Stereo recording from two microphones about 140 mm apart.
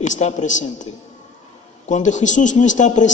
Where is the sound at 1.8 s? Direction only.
60° left (ahead or behind).